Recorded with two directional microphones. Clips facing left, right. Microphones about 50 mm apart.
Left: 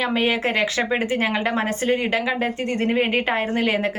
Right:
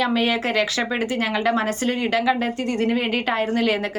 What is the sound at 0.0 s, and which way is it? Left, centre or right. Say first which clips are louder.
Speech: even; left.